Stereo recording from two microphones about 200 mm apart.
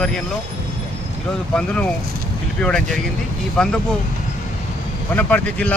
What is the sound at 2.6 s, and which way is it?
Speech, 5° left (ahead or behind).